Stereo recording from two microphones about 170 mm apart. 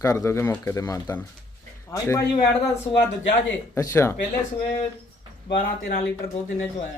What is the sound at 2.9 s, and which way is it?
Speech, 25° left (ahead or behind).